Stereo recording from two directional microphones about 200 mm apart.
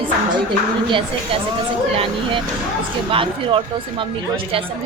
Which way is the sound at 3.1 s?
25° right (ahead or behind).